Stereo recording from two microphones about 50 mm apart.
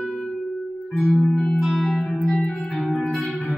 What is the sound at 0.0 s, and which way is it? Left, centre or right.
Music, centre.